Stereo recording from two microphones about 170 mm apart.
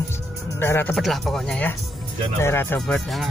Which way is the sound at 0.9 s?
Centre (ahead or behind).